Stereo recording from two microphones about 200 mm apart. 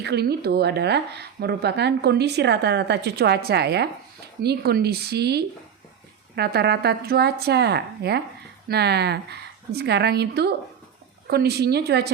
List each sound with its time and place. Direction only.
0.0 s a woman's voice: 55° right (ahead or behind)